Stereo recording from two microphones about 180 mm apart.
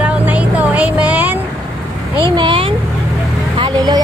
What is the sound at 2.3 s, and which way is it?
Speech, 30° right (ahead or behind).